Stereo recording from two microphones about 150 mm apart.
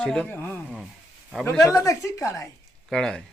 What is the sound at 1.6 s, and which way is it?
Speech, 20° left (ahead or behind).